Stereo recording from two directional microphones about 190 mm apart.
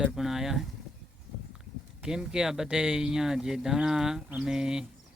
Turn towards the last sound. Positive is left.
turn(degrees=-5)  # may be behind; listen again after turning